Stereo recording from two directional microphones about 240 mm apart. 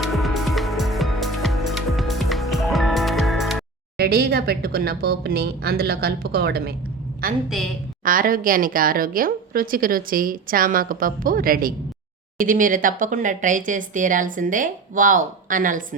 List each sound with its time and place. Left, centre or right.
0.0 s music: centre
3.9 s a woman's voice: right